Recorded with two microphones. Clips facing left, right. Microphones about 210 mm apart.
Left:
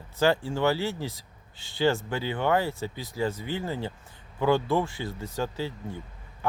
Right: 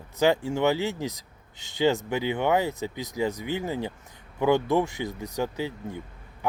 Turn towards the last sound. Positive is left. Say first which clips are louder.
# right 3 dB
turn(degrees=-15)  # may be behind; listen again after turning